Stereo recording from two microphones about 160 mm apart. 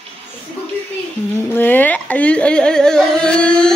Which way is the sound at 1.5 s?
10° left (ahead or behind).